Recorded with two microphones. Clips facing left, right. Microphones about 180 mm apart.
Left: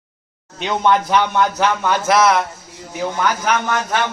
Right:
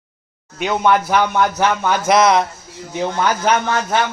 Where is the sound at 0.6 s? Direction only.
10° right (ahead or behind).